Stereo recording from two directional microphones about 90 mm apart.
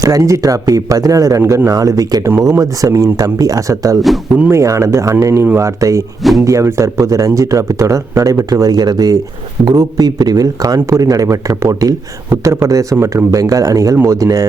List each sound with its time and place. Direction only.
0.0 s speech: 35° right (ahead or behind)